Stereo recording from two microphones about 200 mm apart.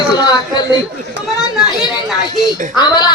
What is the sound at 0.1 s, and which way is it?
Speech, 20° left (ahead or behind).